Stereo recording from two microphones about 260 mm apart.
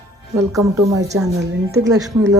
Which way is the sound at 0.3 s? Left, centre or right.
Centre.